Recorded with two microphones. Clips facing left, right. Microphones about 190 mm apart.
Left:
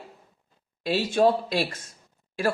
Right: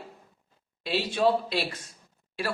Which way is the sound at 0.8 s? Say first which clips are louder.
Left 4 dB; 45° left (ahead or behind).